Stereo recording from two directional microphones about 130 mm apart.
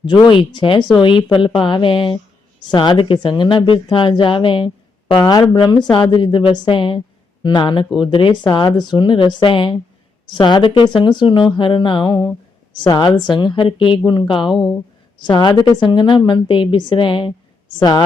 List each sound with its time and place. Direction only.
0.0 s speech: 35° left (ahead or behind)